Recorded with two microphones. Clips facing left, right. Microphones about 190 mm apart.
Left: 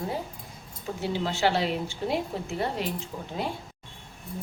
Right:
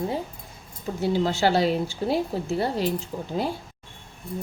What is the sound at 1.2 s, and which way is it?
A woman's voice, 40° right (ahead or behind).